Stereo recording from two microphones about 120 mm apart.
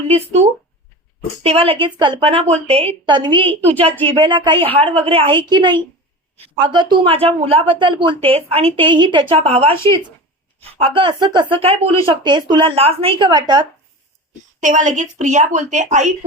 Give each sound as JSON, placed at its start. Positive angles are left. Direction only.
{"t": 1.5, "sound": "a woman's voice", "side_deg": -55}
{"t": 2.3, "sound": "speech", "side_deg": -60}
{"t": 3.1, "sound": "a woman's voice", "side_deg": -40}
{"t": 8.3, "sound": "a woman's voice", "side_deg": -55}
{"t": 9.3, "sound": "a woman's voice", "side_deg": -60}
{"t": 14.6, "sound": "speech", "side_deg": -90}